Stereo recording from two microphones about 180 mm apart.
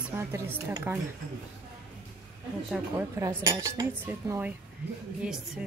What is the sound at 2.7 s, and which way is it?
Speech, 10° right (ahead or behind).